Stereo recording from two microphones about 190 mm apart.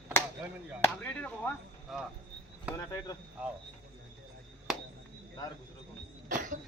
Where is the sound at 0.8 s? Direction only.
10° left (ahead or behind).